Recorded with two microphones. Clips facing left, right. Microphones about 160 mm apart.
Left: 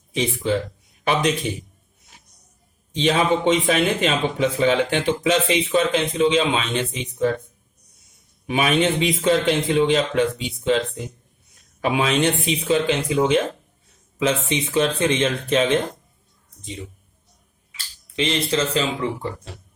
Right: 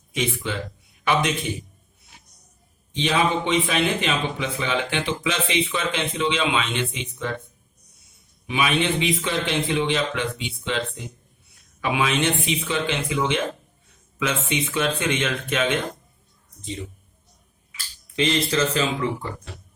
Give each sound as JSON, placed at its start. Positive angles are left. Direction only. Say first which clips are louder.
{"t": 0.1, "sound": "a man's voice", "louder": "left 5 dB", "side_deg": 35}
{"t": 2.9, "sound": "a man's voice", "louder": "left 3 dB", "side_deg": 45}
{"t": 8.4, "sound": "a man's voice", "louder": "left 3 dB", "side_deg": 45}
{"t": 11.8, "sound": "a man's voice", "louder": "left 3 dB", "side_deg": 40}
{"t": 18.2, "sound": "speech", "louder": "even", "side_deg": 25}